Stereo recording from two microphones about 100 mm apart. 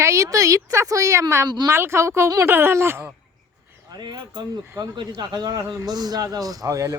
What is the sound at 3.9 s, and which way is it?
A woman's voice, 45° right (ahead or behind).